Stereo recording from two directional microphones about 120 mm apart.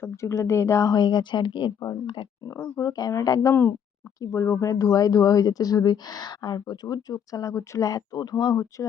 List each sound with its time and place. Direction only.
0.0 s speech: 25° left (ahead or behind)